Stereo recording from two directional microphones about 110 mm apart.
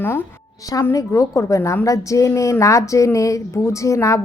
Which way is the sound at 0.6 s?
30° left (ahead or behind).